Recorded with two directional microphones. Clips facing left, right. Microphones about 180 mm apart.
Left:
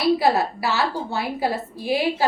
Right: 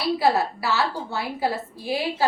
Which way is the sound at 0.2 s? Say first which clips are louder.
Left 1 dB; 15° left (ahead or behind).